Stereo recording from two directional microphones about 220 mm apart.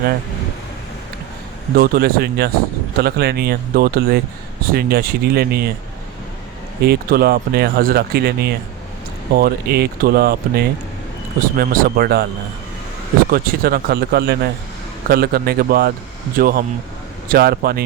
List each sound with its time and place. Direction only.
1.7 s speech: 45° right (ahead or behind)
6.8 s speech: 45° right (ahead or behind)
13.3 s speech: 45° right (ahead or behind)